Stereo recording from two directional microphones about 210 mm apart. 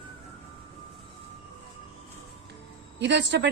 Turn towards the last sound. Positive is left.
turn(degrees=-55)  # may be behind; listen again after turning